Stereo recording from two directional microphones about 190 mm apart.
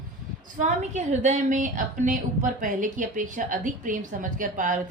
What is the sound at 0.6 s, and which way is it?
A woman's voice, 40° right (ahead or behind).